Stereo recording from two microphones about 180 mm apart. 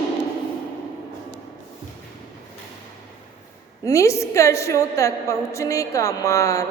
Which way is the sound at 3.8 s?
15° left (ahead or behind).